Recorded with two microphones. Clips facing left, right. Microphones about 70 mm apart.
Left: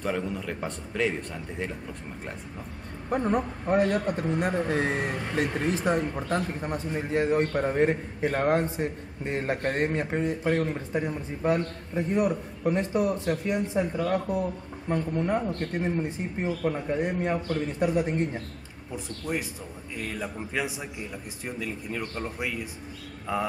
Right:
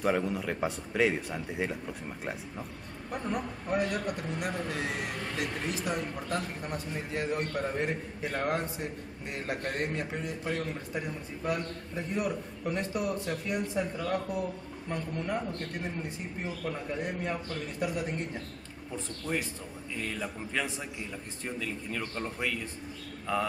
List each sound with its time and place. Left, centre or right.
0.0 s speech: centre
3.1 s speech: left
18.9 s a man's voice: centre